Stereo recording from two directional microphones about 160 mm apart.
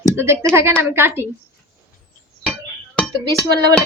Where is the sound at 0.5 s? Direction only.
15° right (ahead or behind).